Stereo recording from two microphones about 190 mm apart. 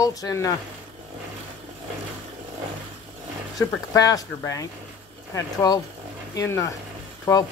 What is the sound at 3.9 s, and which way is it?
Speech, 20° left (ahead or behind).